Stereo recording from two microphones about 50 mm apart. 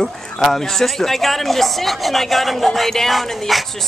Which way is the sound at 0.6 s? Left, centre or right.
Centre.